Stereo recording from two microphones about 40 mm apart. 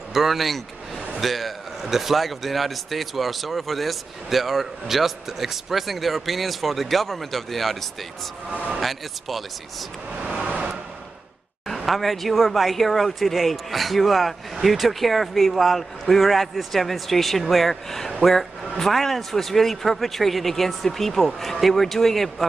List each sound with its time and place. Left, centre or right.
0.1 s a sound: centre
1.2 s a man's voice: centre
10.2 s vehicle: right
11.6 s a man's voice: centre